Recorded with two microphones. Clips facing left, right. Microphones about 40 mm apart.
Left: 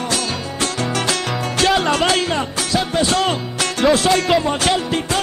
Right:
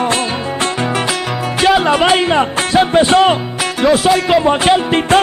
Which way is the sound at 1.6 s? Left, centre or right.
Centre.